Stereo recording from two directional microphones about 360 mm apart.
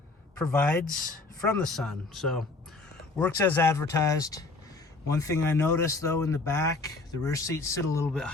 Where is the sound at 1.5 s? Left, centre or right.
Centre.